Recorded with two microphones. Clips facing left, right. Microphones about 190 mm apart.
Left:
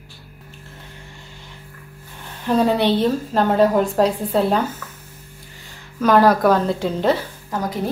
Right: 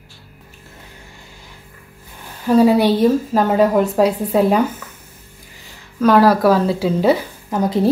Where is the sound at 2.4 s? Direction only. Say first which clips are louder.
Right 5 dB; 10° right (ahead or behind).